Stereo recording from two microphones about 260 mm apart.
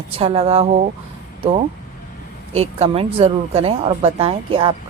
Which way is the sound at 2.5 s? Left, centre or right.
Right.